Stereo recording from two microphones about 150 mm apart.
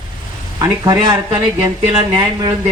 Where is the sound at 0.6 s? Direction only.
25° right (ahead or behind).